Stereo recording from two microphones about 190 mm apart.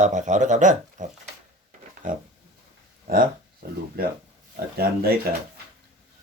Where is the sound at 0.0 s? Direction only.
40° right (ahead or behind).